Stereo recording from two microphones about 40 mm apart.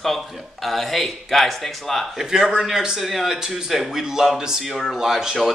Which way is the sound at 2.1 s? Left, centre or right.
Centre.